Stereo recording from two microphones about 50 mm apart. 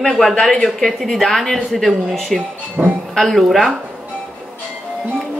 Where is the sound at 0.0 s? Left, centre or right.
Centre.